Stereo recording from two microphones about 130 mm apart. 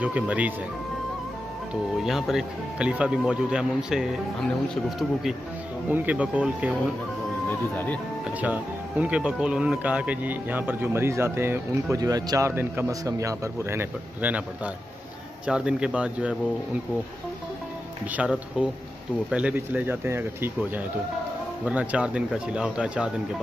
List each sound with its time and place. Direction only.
0.0 s speech: 10° right (ahead or behind)
2.0 s speech: 5° right (ahead or behind)
5.9 s speech: 15° right (ahead or behind)
7.4 s speech: 15° left (ahead or behind)
8.4 s speech: 10° right (ahead or behind)
12.0 s speech: 30° right (ahead or behind); by 16.3 s 10° right (ahead or behind)
18.1 s speech: 5° right (ahead or behind)